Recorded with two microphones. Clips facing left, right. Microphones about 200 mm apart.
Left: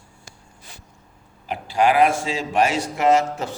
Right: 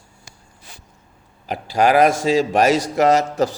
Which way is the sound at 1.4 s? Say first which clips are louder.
Right 2 dB; 40° right (ahead or behind).